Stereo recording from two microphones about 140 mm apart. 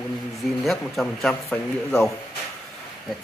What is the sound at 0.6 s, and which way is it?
Speech, centre (ahead or behind).